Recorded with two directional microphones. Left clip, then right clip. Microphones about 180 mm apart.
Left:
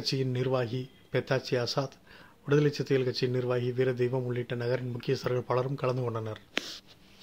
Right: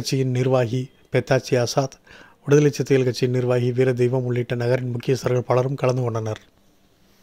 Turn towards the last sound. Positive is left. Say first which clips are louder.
# right 8 dB
turn(degrees=-45)  # may be behind; listen again after turning